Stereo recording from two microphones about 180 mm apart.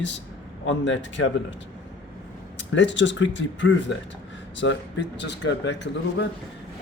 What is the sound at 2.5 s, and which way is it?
Speech, 85° left.